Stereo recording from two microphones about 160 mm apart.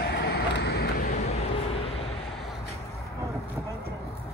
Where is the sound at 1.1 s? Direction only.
40° left (ahead or behind).